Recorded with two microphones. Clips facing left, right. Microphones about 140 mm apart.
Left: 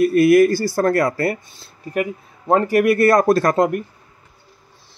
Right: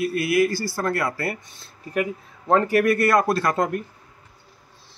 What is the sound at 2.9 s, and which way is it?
Speech, 35° left (ahead or behind).